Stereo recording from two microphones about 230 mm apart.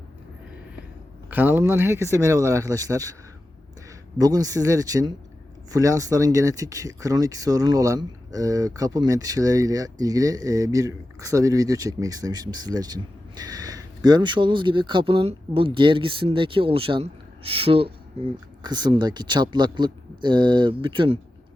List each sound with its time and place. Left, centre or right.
1.3 s speech: centre
4.2 s speech: centre